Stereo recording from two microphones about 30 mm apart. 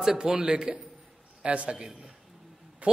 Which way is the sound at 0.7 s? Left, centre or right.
Right.